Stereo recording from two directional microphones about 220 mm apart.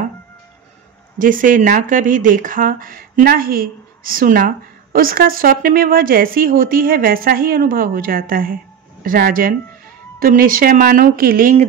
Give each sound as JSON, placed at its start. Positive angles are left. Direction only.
{"t": 1.1, "sound": "speech", "side_deg": -35}